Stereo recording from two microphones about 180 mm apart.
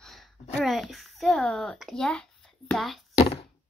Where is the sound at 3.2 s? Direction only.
30° left (ahead or behind).